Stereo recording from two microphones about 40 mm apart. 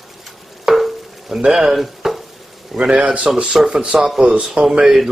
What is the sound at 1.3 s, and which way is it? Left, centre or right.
Stir, centre.